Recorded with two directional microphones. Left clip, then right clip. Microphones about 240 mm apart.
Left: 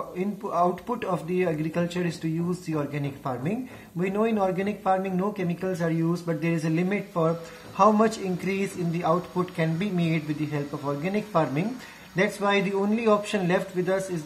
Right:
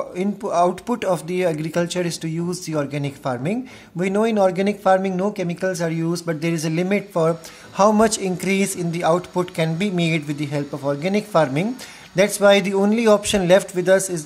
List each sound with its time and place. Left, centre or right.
0.2 s speech: right